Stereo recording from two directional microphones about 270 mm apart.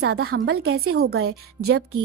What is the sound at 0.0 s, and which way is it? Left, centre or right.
A woman's voice, right.